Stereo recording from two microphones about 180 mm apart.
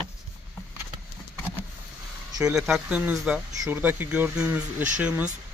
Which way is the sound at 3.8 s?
10° right (ahead or behind).